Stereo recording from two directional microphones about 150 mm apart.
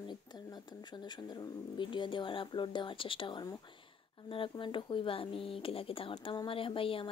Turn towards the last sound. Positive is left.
turn(degrees=35)  # may be behind; listen again after turning